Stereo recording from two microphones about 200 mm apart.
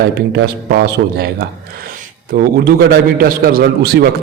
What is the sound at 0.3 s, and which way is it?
A man's voice, 55° right (ahead or behind).